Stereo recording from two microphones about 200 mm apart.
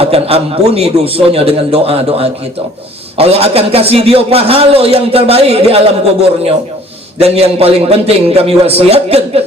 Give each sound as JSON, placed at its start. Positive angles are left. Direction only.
{"t": 0.0, "sound": "a man's voice", "side_deg": -30}
{"t": 7.2, "sound": "a man's voice", "side_deg": -30}